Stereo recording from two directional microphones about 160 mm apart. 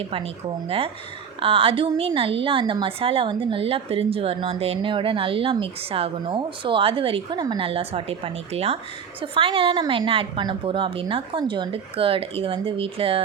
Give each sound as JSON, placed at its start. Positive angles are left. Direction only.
{"t": 0.0, "sound": "a woman's voice", "side_deg": -35}
{"t": 1.4, "sound": "a woman's voice", "side_deg": -35}